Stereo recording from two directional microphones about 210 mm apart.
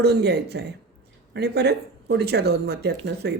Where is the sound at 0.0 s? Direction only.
50° right (ahead or behind).